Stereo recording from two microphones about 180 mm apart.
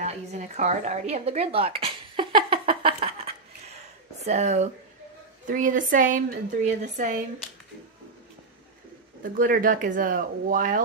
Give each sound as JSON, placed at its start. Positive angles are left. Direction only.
{"t": 0.0, "sound": "a sound", "side_deg": -40}
{"t": 4.2, "sound": "a woman's voice", "side_deg": -40}
{"t": 9.2, "sound": "a woman's voice", "side_deg": -50}